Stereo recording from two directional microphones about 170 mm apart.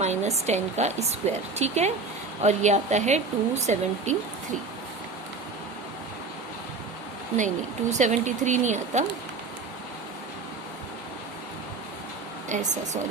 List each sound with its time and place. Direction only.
0.0 s a woman's voice: 40° right (ahead or behind)
7.3 s a woman's voice: 45° right (ahead or behind)